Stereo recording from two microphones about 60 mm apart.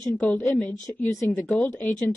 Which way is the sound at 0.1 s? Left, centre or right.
Centre.